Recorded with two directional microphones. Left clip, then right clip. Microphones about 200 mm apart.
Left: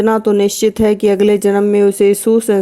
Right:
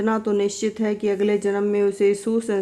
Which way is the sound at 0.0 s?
40° left (ahead or behind).